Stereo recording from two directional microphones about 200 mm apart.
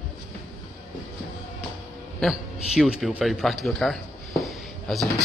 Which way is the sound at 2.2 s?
Centre (ahead or behind).